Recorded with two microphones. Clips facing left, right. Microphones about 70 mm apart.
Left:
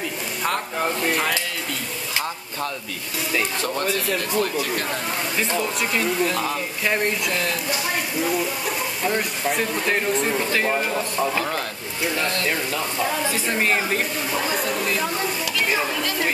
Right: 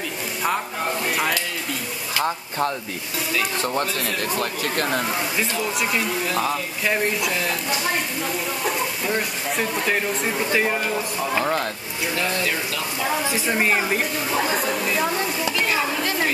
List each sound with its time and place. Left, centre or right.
2.1 s speech: right
4.4 s speech: right
5.4 s speech: centre
9.0 s speech: centre
13.3 s a woman's voice: centre
15.4 s stir: right